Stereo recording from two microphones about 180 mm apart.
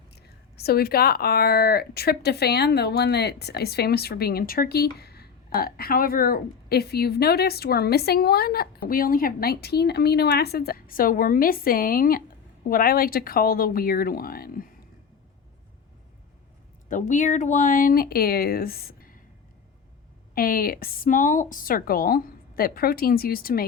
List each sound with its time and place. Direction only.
0.2 s speech: 60° left (ahead or behind)
16.9 s speech: 45° left (ahead or behind)
20.3 s speech: 55° left (ahead or behind)